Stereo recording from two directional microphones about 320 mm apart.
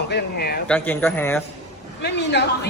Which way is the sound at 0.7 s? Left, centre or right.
Centre.